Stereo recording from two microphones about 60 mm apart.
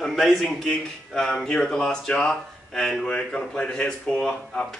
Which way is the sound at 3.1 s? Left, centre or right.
Centre.